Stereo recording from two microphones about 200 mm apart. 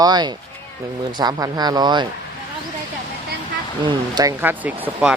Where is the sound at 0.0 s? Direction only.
20° right (ahead or behind).